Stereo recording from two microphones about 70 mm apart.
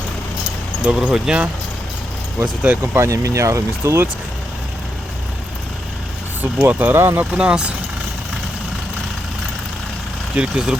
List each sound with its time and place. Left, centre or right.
0.8 s speech: centre
2.8 s speech: right
6.4 s speech: right
7.3 s speech: centre
10.3 s speech: centre